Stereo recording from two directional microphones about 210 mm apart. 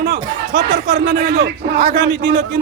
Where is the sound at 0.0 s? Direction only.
50° right (ahead or behind).